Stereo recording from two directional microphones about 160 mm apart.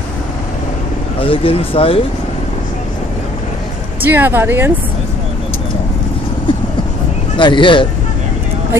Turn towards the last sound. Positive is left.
turn(degrees=30)  # may be behind; listen again after turning